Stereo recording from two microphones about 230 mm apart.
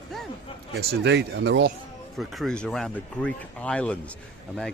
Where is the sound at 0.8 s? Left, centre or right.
Right.